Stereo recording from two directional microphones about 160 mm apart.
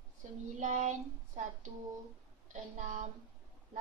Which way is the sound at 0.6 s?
50° right (ahead or behind).